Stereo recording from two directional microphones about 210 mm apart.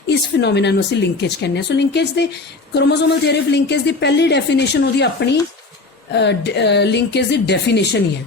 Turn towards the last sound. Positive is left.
turn(degrees=55)  # may be behind; listen again after turning